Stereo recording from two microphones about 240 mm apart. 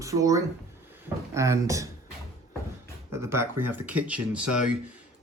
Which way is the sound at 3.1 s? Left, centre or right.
Centre.